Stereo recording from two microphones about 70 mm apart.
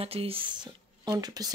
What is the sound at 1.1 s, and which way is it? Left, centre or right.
Speech, right.